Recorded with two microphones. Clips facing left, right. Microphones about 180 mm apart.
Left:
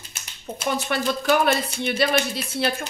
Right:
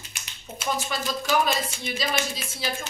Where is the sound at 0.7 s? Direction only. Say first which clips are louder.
Left 4 dB; 65° left (ahead or behind).